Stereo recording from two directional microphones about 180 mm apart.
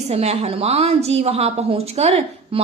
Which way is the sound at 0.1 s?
35° right (ahead or behind).